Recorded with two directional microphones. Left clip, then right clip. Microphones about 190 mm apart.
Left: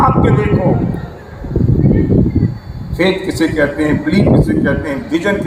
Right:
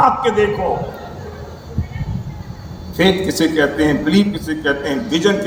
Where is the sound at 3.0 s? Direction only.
55° right (ahead or behind).